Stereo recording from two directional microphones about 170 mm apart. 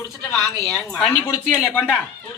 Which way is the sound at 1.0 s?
10° left (ahead or behind).